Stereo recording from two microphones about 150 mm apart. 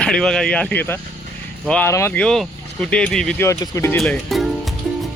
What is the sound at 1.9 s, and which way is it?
Speech, 20° left (ahead or behind).